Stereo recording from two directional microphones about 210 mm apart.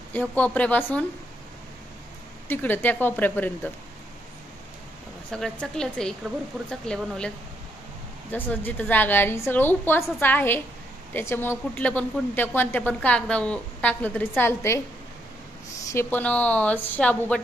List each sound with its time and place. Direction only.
0.1 s a woman's voice: 5° left (ahead or behind)
2.4 s a woman's voice: 10° left (ahead or behind)
5.3 s a woman's voice: 5° left (ahead or behind)
15.9 s a woman's voice: 10° left (ahead or behind)